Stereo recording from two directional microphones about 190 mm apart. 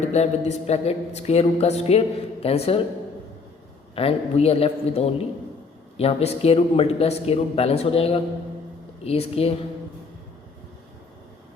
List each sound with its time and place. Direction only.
0.0 s speech: 35° left (ahead or behind)
3.9 s speech: 30° left (ahead or behind)